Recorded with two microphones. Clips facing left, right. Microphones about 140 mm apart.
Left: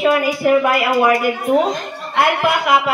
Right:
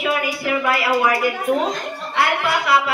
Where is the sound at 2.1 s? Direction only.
50° left (ahead or behind).